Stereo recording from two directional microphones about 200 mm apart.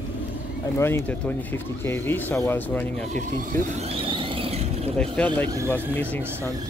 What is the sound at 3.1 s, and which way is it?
Speech, 35° right (ahead or behind).